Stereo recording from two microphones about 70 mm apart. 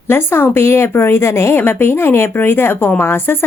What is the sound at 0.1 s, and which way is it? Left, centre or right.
A woman's voice, left.